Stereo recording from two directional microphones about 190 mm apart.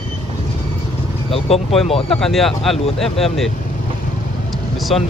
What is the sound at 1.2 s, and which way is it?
Speech, 30° left (ahead or behind).